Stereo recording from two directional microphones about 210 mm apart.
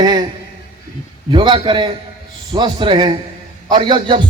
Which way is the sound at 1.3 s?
25° right (ahead or behind).